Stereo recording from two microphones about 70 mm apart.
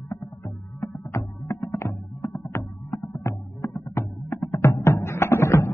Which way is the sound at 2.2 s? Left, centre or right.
Centre.